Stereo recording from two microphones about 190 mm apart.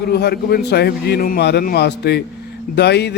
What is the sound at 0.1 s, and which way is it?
A man's voice, 55° left (ahead or behind).